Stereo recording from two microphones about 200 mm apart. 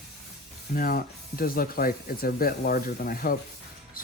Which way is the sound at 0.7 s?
45° left (ahead or behind).